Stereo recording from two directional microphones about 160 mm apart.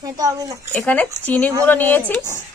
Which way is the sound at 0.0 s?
20° right (ahead or behind).